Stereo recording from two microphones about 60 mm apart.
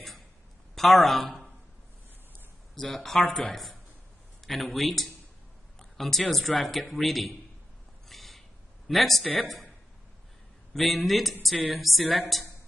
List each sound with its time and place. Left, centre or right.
0.7 s speech: centre
2.7 s speech: centre
5.8 s a sound: centre
6.6 s speech: centre
8.1 s a sound: centre
9.4 s speech: centre
11.5 s a woman's voice: centre
11.8 s speech: centre